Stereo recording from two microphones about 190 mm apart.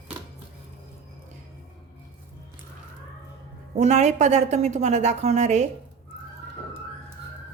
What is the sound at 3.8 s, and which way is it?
A woman's voice, 35° right (ahead or behind).